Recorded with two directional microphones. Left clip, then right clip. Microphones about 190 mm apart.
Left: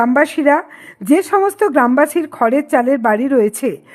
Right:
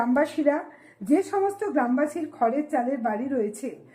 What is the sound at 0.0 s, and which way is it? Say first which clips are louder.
Speech: left 10 dB; 40° left (ahead or behind).